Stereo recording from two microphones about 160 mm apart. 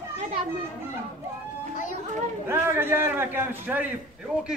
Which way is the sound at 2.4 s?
15° right (ahead or behind).